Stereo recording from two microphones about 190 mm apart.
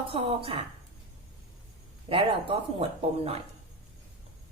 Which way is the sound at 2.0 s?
30° right (ahead or behind).